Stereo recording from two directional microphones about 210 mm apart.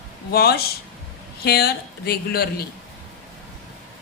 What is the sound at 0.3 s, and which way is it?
A man's voice, 50° left (ahead or behind).